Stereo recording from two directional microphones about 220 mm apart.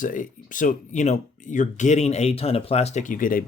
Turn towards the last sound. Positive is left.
turn(degrees=40)  # may be behind; listen again after turning